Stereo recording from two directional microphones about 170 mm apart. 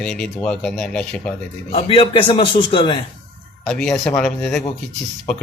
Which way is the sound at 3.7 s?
Centre (ahead or behind).